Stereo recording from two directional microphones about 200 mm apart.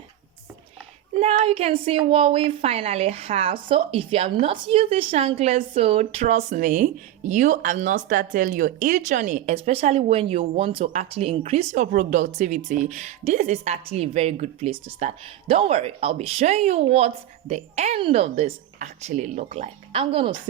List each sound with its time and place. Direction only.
1.2 s a woman's voice: 30° right (ahead or behind)